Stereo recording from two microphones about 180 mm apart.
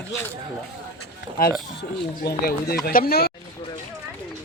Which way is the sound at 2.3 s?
60° left (ahead or behind).